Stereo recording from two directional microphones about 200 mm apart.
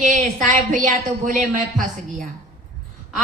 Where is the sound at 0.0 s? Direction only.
35° right (ahead or behind).